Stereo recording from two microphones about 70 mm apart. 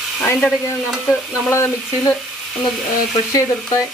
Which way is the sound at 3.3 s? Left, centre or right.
Left.